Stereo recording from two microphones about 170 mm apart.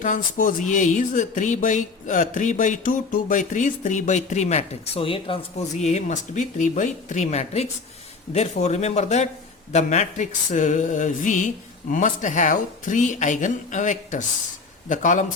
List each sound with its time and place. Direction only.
0.0 s a man's voice: 50° left (ahead or behind)